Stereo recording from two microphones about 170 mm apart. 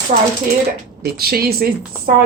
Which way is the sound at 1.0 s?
65° right (ahead or behind).